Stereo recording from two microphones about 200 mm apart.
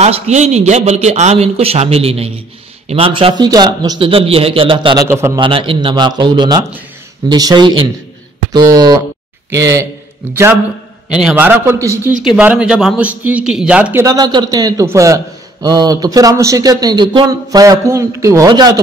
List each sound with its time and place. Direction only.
0.0 s a man's voice: 35° right (ahead or behind); by 5.4 s 15° right (ahead or behind)
5.4 s a man's voice: 25° right (ahead or behind)